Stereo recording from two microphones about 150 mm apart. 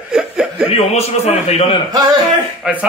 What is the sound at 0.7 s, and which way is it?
A man's voice, 45° left (ahead or behind).